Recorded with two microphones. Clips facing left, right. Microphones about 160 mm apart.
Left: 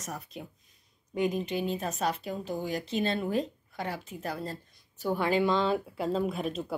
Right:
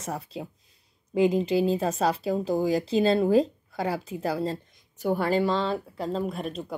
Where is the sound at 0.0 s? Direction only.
30° right (ahead or behind).